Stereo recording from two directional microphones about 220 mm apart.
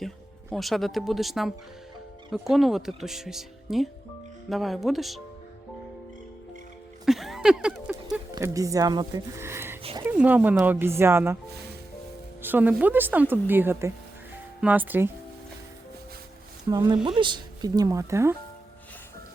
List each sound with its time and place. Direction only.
0.5 s speech: centre (ahead or behind)
7.0 s a sound: centre (ahead or behind)
8.3 s speech: 15° right (ahead or behind)
12.4 s speech: 10° right (ahead or behind)
16.6 s speech: 20° right (ahead or behind)